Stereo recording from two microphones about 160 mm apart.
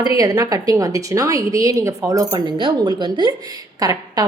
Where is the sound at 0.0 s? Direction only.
20° right (ahead or behind).